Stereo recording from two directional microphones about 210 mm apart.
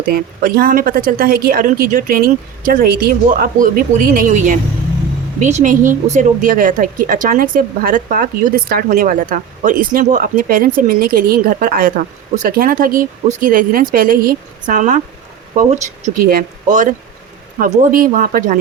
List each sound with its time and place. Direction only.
0.1 s a woman's voice: 45° right (ahead or behind)